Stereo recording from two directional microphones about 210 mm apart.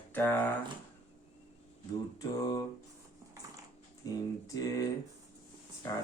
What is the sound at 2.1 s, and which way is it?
Speech, 20° left (ahead or behind).